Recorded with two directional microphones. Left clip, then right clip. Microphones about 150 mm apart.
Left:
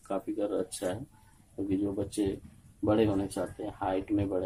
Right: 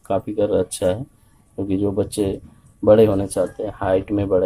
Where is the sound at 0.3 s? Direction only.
55° right (ahead or behind).